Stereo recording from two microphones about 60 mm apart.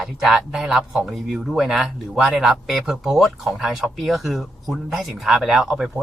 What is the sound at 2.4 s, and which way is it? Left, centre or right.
Speech, centre.